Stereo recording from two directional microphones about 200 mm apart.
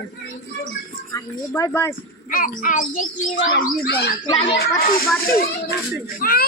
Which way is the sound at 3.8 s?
55° left (ahead or behind).